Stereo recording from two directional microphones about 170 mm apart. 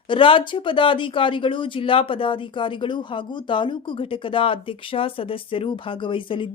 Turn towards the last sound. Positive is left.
turn(degrees=30)  # may be behind; listen again after turning